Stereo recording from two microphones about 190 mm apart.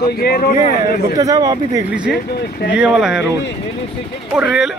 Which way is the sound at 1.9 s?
5° right (ahead or behind).